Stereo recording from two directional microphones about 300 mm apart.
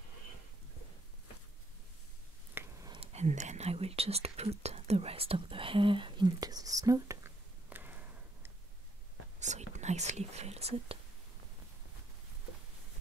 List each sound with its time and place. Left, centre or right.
2.5 s whispering: centre
9.4 s speech: right